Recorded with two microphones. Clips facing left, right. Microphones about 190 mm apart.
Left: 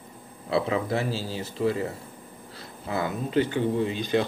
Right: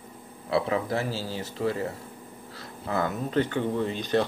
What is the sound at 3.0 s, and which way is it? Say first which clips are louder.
Speech: left 3 dB; 10° left (ahead or behind).